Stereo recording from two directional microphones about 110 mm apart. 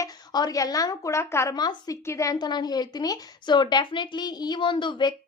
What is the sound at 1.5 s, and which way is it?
A woman's voice, 40° left (ahead or behind).